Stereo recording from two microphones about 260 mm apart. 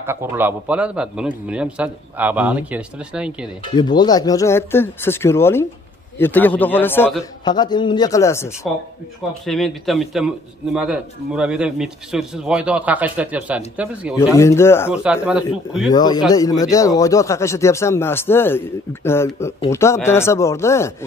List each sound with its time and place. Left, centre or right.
0.0 s a man's voice: centre
3.7 s a man's voice: centre
14.3 s speech: centre
14.9 s a man's voice: centre
15.9 s speech: centre